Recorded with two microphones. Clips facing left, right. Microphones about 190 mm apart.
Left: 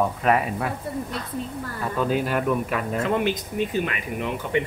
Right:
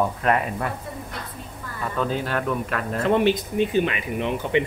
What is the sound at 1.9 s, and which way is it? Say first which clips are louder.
Speech: left 2 dB; 10° left (ahead or behind).